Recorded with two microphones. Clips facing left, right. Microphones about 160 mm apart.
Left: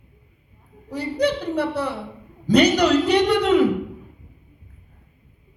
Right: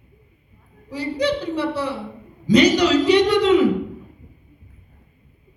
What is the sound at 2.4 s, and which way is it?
A man's voice, 60° left (ahead or behind).